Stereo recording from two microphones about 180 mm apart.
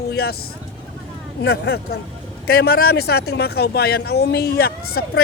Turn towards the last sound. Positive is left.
turn(degrees=60)  # may be behind; listen again after turning